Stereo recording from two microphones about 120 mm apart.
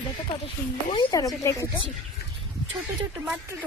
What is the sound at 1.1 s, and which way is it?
Speech, 30° left (ahead or behind).